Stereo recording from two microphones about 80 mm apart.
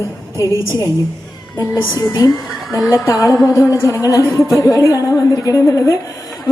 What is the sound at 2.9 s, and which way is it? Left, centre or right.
A woman's voice, left.